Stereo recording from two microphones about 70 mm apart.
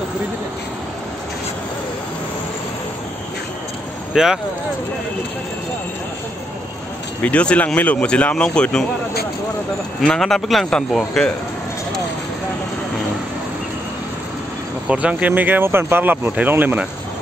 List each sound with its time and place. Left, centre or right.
4.1 s speech: centre
7.2 s speech: centre
10.0 s speech: centre
14.9 s speech: centre